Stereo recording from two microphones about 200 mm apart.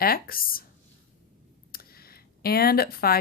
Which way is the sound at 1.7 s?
50° left (ahead or behind).